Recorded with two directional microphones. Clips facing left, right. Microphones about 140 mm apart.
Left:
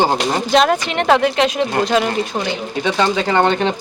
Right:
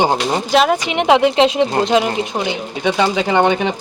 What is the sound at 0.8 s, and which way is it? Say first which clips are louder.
Speech: right 2 dB; 15° right (ahead or behind).